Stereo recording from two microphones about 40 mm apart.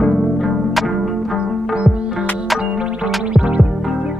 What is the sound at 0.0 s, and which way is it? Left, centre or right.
Music, centre.